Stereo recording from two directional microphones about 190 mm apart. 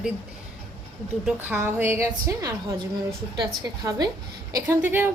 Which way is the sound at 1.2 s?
10° right (ahead or behind).